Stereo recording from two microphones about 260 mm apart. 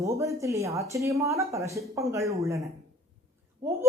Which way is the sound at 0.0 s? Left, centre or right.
Centre.